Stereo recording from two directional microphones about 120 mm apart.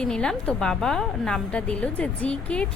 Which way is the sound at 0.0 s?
5° left (ahead or behind).